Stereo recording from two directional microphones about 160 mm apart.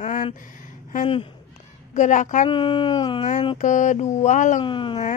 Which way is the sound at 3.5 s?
50° left (ahead or behind).